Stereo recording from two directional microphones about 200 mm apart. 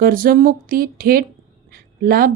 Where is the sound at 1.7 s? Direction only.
45° right (ahead or behind).